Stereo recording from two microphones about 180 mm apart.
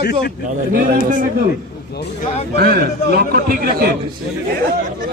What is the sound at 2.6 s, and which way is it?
A man's voice, 55° right (ahead or behind).